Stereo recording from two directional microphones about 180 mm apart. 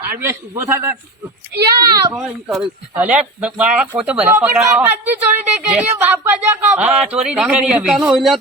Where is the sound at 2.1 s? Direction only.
5° right (ahead or behind).